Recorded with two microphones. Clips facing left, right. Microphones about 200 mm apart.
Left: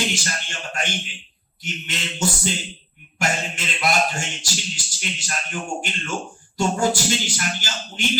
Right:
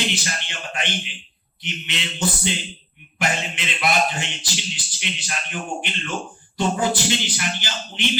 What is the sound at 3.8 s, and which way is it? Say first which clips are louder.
A man's voice: even; 45° left (ahead or behind).